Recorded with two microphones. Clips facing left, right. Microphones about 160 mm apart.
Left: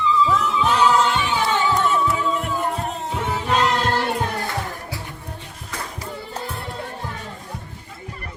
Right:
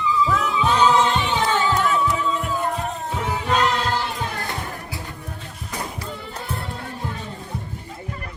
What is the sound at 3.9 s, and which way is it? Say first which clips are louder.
Music: left 3 dB; 65° left (ahead or behind).